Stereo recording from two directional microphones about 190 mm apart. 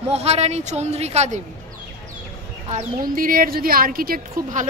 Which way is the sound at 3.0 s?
50° right (ahead or behind).